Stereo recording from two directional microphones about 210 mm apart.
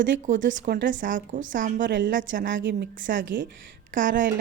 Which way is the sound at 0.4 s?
40° right (ahead or behind).